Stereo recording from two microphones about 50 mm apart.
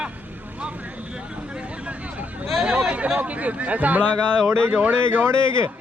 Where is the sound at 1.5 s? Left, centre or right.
Right.